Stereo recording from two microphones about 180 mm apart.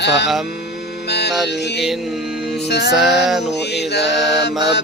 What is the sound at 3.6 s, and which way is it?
Music, 65° left (ahead or behind).